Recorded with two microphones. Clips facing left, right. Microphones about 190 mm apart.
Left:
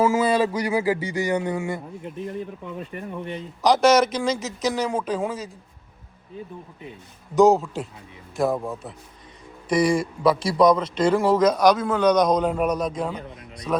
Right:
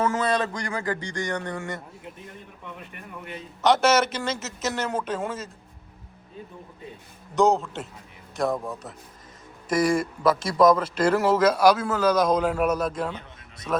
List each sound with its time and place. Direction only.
0.0 s speech: 5° left (ahead or behind)
2.9 s speech: 30° left (ahead or behind)
3.6 s a man's voice: centre (ahead or behind)
7.3 s a man's voice: centre (ahead or behind)